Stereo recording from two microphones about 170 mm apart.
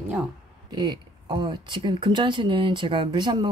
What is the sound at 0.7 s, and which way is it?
Speech, 25° right (ahead or behind).